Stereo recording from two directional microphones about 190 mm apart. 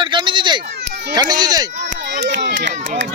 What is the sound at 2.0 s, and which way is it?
Run, 65° right (ahead or behind).